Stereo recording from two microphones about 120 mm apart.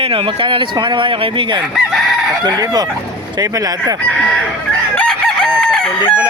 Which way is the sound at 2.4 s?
30° right (ahead or behind).